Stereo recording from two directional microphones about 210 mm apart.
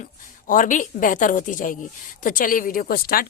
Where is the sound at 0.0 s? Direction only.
40° left (ahead or behind).